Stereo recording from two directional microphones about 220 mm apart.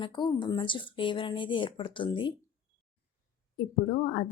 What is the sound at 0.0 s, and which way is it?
A woman's voice, 20° left (ahead or behind).